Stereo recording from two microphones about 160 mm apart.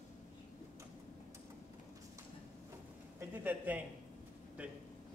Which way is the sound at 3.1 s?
10° right (ahead or behind).